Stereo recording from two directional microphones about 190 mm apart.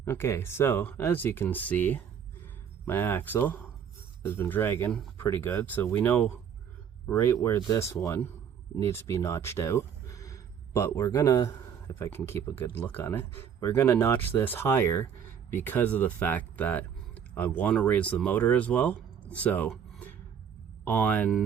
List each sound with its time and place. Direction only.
0.0 s speech: 15° left (ahead or behind)
19.7 s a sound: 10° left (ahead or behind)
20.8 s speech: 10° left (ahead or behind)